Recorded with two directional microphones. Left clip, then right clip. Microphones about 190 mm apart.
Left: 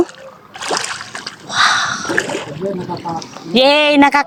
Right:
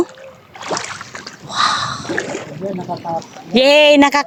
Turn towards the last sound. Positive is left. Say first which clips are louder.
# right 1 dB
turn(degrees=-20)  # may be behind; listen again after turning